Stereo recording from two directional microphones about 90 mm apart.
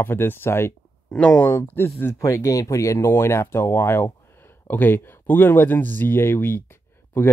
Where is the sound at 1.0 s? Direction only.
5° left (ahead or behind).